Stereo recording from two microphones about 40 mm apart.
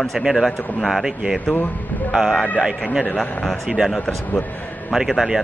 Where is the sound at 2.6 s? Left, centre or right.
Right.